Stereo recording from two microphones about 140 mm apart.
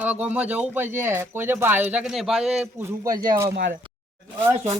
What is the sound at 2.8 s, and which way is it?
Speech, 20° right (ahead or behind).